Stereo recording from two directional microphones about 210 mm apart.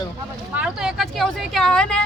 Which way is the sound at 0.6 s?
5° right (ahead or behind).